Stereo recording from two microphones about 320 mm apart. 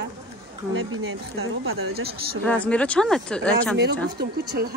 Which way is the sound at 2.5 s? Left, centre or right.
Centre.